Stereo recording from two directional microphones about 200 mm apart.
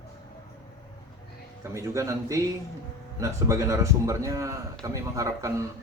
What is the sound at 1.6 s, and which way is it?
A man's voice, 15° right (ahead or behind).